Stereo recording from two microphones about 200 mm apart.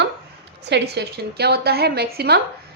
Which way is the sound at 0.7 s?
55° right (ahead or behind).